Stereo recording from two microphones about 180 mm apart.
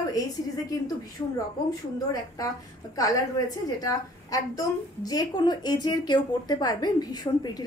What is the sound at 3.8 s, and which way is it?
A woman's voice, 20° left (ahead or behind).